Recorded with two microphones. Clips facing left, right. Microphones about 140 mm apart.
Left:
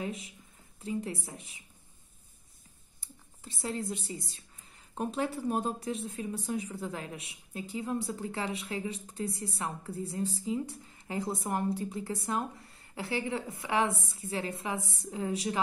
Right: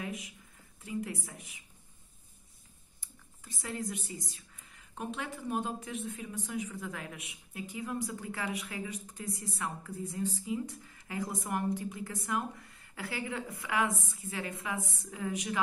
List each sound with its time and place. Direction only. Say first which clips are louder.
0.0 s speech: left 3 dB; 30° left (ahead or behind)
3.0 s speech: left 5 dB; 30° left (ahead or behind)